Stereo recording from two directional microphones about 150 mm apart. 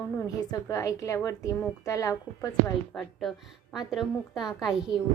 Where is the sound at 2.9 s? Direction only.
Centre (ahead or behind).